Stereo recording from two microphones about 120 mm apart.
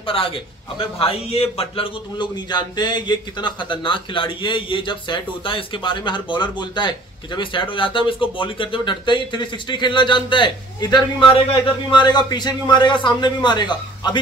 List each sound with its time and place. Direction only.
0.0 s speech: 50° left (ahead or behind)
2.1 s speech: 35° left (ahead or behind)